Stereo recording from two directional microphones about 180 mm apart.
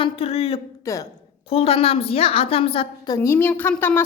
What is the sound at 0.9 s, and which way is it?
Speech, 15° left (ahead or behind).